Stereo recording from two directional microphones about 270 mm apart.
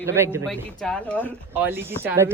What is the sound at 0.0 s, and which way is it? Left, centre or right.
Speech, centre.